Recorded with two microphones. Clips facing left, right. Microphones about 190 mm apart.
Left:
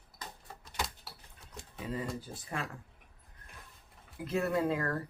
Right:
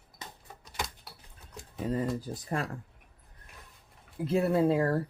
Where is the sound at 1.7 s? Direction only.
45° right (ahead or behind).